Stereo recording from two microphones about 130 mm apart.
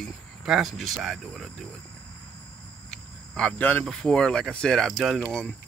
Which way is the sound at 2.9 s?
5° left (ahead or behind).